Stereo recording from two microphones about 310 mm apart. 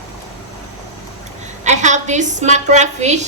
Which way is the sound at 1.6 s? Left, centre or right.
Right.